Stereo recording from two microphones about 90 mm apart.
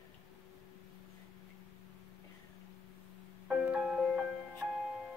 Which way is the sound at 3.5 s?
10° right (ahead or behind).